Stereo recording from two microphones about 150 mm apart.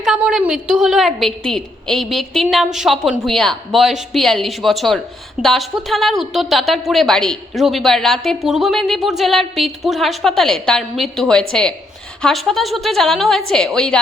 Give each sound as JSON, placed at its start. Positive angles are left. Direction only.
{"t": 0.0, "sound": "a woman's voice", "side_deg": -5}